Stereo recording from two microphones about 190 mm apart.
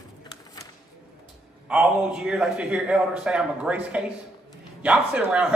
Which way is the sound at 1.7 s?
5° right (ahead or behind).